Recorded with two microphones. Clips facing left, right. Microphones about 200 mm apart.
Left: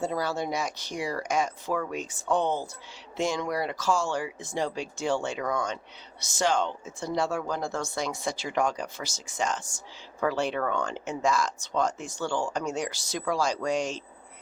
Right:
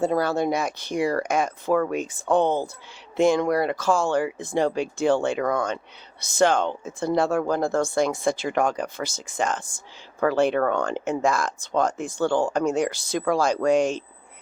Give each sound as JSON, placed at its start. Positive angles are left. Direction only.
{"t": 0.0, "sound": "speech", "side_deg": -55}